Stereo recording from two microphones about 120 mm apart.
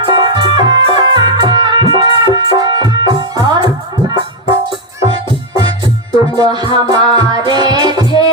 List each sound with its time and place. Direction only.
0.0 s music: 35° right (ahead or behind)
5.5 s music: 35° right (ahead or behind)